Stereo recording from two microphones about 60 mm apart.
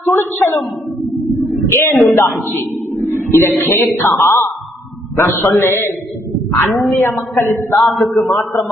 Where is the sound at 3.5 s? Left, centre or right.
Left.